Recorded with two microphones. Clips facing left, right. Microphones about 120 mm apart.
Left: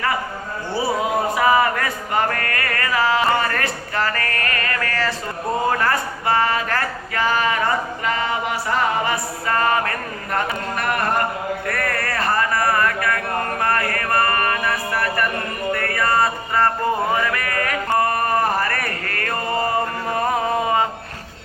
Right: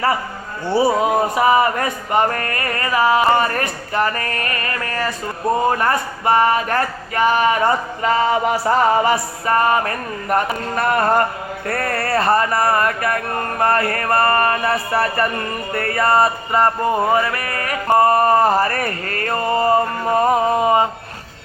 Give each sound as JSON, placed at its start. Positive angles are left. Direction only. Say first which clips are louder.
{"t": 0.7, "sound": "male singing", "louder": "right 6 dB", "side_deg": -25}
{"t": 11.6, "sound": "speech", "louder": "right 2 dB", "side_deg": -30}
{"t": 13.6, "sound": "male singing", "louder": "right 8 dB", "side_deg": -25}
{"t": 17.9, "sound": "a sound", "louder": "right 7 dB", "side_deg": -25}